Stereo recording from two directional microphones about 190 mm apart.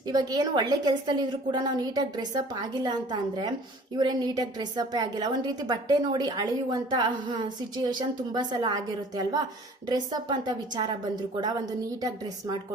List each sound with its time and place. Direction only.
0.1 s a woman's voice: 20° right (ahead or behind)
11.9 s a woman's voice: 20° right (ahead or behind)